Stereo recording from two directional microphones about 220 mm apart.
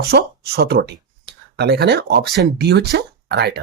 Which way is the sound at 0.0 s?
45° right (ahead or behind).